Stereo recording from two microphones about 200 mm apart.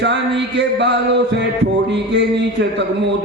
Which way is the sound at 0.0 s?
60° right (ahead or behind).